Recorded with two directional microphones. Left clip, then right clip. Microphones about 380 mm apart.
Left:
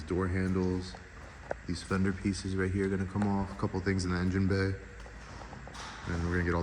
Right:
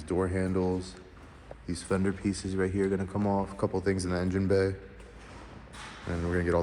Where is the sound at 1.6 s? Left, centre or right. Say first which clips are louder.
Right 5 dB; centre.